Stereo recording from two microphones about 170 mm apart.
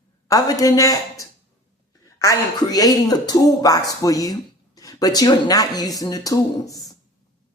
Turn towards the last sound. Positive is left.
turn(degrees=20)  # may be behind; listen again after turning